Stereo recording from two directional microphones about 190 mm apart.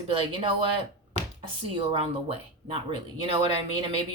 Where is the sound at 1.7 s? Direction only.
30° right (ahead or behind).